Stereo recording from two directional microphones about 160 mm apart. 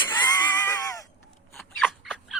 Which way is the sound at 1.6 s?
5° left (ahead or behind).